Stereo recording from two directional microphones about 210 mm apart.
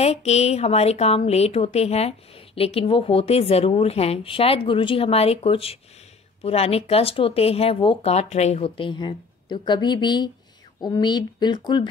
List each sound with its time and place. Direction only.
0.0 s a woman's voice: 30° left (ahead or behind)